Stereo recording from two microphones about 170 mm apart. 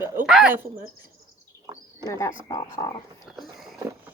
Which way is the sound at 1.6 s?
25° right (ahead or behind).